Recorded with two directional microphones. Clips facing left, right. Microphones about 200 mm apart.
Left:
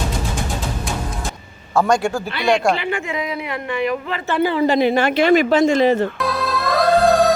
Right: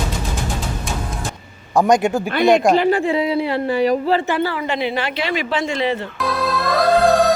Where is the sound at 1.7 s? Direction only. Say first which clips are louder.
Right 2 dB; 20° right (ahead or behind).